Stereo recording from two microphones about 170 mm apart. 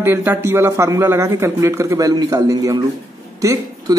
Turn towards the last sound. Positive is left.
turn(degrees=-20)  # may be behind; listen again after turning